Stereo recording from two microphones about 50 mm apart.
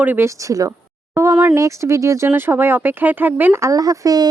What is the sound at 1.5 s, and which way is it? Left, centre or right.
Speech, right.